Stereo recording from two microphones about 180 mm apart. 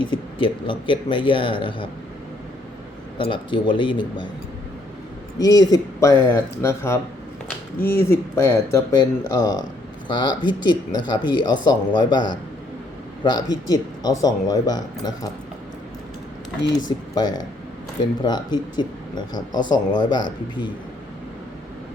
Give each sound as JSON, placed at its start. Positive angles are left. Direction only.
{"t": 0.0, "sound": "speech", "side_deg": 25}
{"t": 3.2, "sound": "speech", "side_deg": 30}
{"t": 5.4, "sound": "speech", "side_deg": 20}
{"t": 17.2, "sound": "speech", "side_deg": 20}